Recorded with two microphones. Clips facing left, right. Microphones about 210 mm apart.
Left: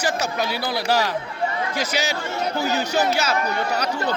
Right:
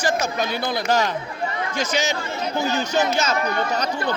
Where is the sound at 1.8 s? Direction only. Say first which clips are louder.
Right 3 dB; 5° left (ahead or behind).